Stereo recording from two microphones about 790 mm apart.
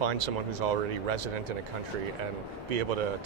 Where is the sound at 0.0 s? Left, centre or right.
Right.